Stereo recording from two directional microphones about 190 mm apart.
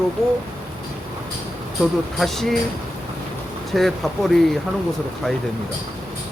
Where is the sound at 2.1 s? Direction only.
Centre (ahead or behind).